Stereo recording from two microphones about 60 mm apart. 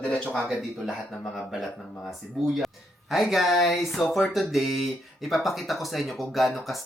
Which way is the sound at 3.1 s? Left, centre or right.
Centre.